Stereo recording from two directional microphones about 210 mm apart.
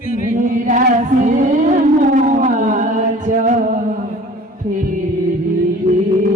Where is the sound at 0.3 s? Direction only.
40° right (ahead or behind).